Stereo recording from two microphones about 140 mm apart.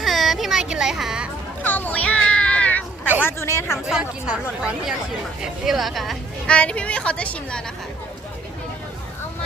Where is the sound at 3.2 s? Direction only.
15° left (ahead or behind).